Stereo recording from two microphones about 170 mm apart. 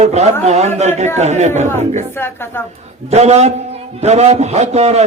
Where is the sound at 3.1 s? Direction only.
40° right (ahead or behind).